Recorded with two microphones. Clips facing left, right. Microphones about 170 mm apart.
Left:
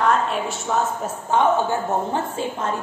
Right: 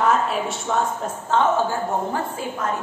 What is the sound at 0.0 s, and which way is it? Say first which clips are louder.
A woman's voice: even; 5° right (ahead or behind).